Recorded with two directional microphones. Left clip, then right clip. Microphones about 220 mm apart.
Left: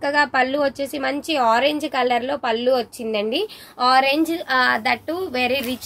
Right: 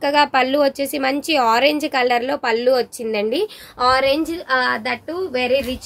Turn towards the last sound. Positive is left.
turn(degrees=-10)  # may be behind; listen again after turning